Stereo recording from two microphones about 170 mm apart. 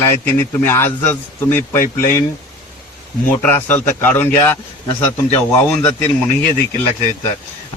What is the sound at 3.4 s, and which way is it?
A man's voice, 10° left (ahead or behind).